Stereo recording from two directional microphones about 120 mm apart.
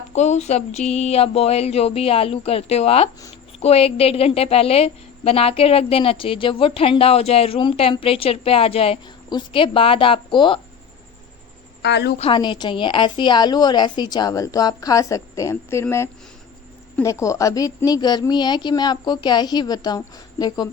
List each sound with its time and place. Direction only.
0.1 s a woman's voice: 70° left (ahead or behind); by 10.6 s 40° left (ahead or behind)
12.2 s a woman's voice: 40° left (ahead or behind)